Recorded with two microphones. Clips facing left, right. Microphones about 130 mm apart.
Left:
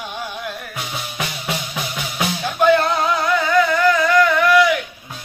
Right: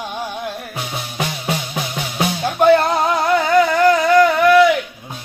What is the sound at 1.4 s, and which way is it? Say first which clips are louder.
Music: right 3 dB; 35° right (ahead or behind).